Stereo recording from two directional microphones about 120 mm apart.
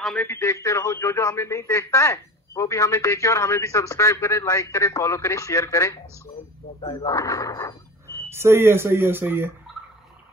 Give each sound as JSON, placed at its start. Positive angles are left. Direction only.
{"t": 0.0, "sound": "speech", "side_deg": 5}
{"t": 0.3, "sound": "speech", "side_deg": 25}
{"t": 7.1, "sound": "speech", "side_deg": 25}
{"t": 8.3, "sound": "speech", "side_deg": -20}